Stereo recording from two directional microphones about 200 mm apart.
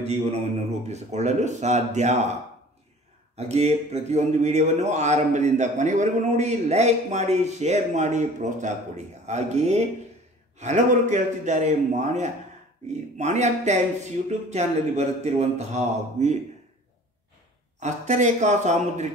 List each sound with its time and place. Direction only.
0.0 s a man's voice: 30° right (ahead or behind)
3.3 s a man's voice: 35° right (ahead or behind)
17.7 s a man's voice: 35° right (ahead or behind)